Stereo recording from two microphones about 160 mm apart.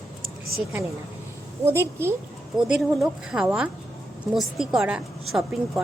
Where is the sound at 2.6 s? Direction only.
5° right (ahead or behind).